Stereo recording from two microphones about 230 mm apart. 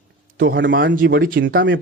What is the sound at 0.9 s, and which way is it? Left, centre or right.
Speech, right.